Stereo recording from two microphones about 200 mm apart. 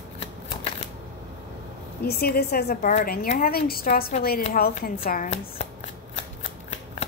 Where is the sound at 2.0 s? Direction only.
50° left (ahead or behind).